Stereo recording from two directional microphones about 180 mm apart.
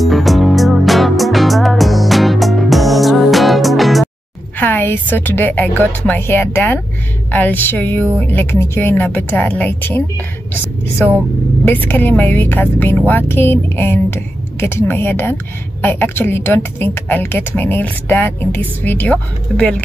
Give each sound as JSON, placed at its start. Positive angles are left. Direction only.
{"t": 0.0, "sound": "music", "side_deg": 0}
{"t": 4.6, "sound": "a woman's voice", "side_deg": 10}
{"t": 11.6, "sound": "a woman's voice", "side_deg": 10}